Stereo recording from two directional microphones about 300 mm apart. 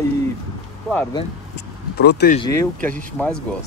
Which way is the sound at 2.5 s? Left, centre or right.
Centre.